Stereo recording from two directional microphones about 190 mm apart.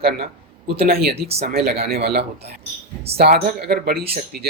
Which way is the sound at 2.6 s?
30° right (ahead or behind).